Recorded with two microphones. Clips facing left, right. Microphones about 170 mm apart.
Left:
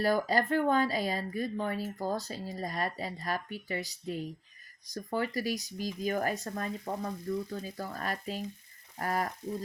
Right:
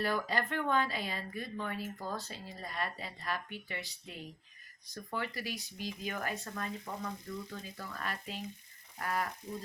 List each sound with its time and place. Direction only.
0.0 s speech: 40° left (ahead or behind)